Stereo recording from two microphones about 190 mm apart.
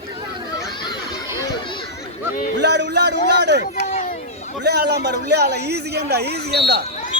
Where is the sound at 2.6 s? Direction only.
65° right (ahead or behind).